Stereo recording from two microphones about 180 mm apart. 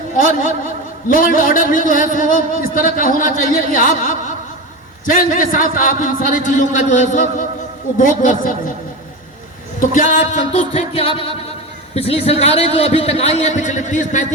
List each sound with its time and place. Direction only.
0.2 s speech: 45° left (ahead or behind)
9.8 s a man's voice: 45° left (ahead or behind)